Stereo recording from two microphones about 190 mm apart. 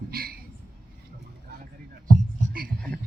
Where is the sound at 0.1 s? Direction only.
50° right (ahead or behind).